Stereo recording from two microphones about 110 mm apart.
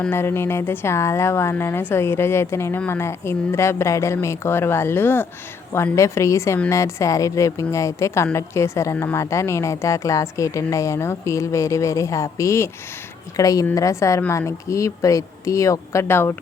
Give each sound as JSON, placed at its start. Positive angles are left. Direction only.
{"t": 0.1, "sound": "a woman's voice", "side_deg": 20}